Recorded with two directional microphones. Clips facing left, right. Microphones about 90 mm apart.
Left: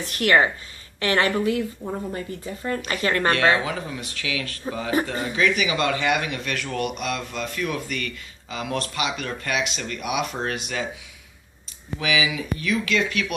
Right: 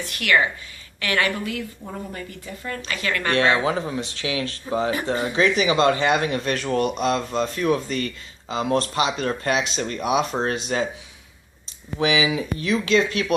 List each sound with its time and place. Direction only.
0.1 s speech: 35° left (ahead or behind)
3.5 s speech: 30° right (ahead or behind)
11.9 s speech: 30° right (ahead or behind)